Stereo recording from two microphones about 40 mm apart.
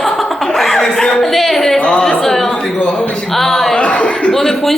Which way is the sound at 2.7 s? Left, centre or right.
Left.